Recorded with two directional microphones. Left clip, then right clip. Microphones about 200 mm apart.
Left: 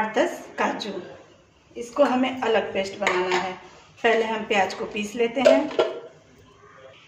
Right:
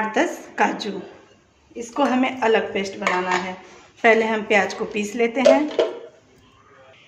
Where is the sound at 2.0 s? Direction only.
45° right (ahead or behind).